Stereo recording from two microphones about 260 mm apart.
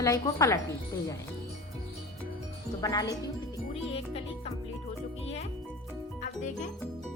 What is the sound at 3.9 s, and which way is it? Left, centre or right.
Music, left.